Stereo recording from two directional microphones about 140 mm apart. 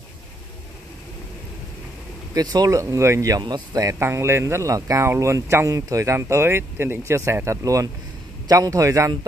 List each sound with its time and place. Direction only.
2.3 s speech: 25° right (ahead or behind)